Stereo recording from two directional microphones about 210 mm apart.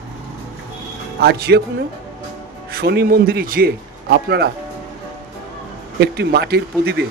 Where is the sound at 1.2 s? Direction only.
50° right (ahead or behind).